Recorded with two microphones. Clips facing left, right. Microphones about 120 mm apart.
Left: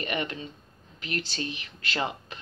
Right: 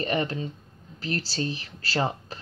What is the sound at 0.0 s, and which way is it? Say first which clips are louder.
Speech: right 5 dB; 35° right (ahead or behind).